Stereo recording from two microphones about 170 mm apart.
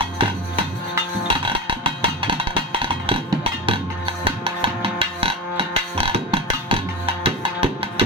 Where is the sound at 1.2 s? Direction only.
30° right (ahead or behind).